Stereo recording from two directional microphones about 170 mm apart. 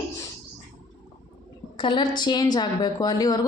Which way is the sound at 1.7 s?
30° left (ahead or behind).